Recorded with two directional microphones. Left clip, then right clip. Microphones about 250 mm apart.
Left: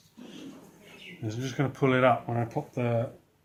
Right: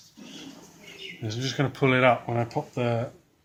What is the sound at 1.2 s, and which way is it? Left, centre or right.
Speech, right.